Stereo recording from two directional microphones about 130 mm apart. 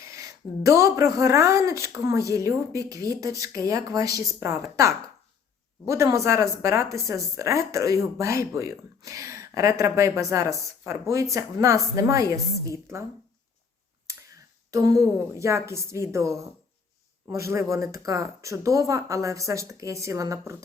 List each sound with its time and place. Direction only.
0.0 s speech: 25° right (ahead or behind)
14.7 s speech: 25° right (ahead or behind)